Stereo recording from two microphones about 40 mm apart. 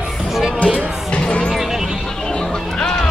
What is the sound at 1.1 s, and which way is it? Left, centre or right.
Music, left.